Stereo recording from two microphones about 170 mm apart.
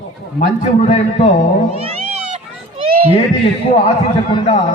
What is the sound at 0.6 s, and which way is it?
Speech, 40° left (ahead or behind).